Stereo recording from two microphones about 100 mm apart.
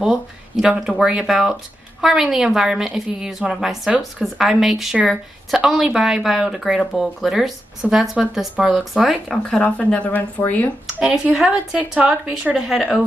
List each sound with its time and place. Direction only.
0.0 s speech: 5° right (ahead or behind)
9.6 s speech: 10° left (ahead or behind)
11.0 s speech: 10° right (ahead or behind)